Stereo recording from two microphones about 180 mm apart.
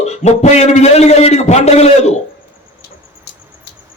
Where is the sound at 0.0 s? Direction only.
35° left (ahead or behind).